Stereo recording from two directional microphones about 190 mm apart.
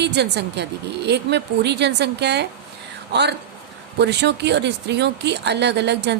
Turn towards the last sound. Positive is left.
turn(degrees=-65)  # may be behind; listen again after turning